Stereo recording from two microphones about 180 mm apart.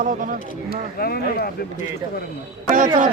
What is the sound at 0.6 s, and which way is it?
Speech, 55° left (ahead or behind).